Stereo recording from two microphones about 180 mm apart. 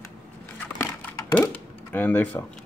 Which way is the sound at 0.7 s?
10° left (ahead or behind).